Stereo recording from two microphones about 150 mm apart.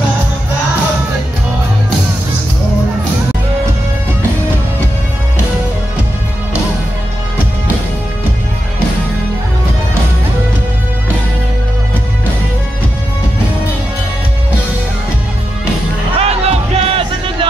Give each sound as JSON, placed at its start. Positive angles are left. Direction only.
{"t": 16.2, "sound": "music", "side_deg": -40}